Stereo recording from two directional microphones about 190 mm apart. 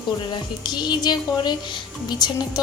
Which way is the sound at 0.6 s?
20° left (ahead or behind).